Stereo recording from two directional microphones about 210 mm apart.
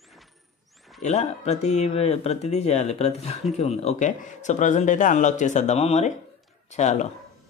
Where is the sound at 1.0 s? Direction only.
30° left (ahead or behind).